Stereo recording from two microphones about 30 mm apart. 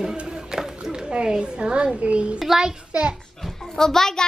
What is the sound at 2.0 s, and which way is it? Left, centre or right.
Speech, right.